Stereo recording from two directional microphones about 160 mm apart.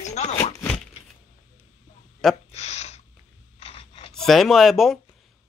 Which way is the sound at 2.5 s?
40° left (ahead or behind).